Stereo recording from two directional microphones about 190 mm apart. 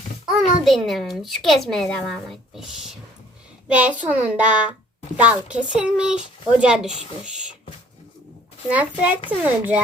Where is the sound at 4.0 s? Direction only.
10° right (ahead or behind).